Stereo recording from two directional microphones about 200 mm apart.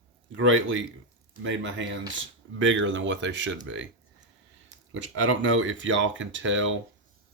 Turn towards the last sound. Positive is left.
turn(degrees=-70)  # may be behind; listen again after turning